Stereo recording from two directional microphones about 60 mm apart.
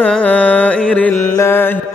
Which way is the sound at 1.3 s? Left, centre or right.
Left.